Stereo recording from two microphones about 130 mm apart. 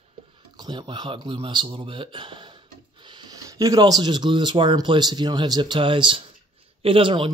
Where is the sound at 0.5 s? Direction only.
35° right (ahead or behind).